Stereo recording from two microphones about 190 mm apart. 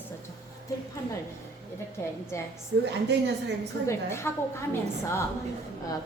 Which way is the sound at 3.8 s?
15° left (ahead or behind).